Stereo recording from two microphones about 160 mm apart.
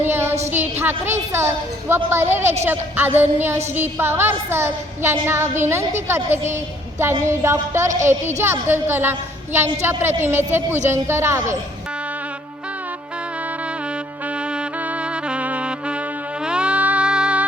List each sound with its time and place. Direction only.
0.0 s a sound: 15° right (ahead or behind)
0.5 s a woman's voice: 10° right (ahead or behind)
15.1 s music: 5° right (ahead or behind)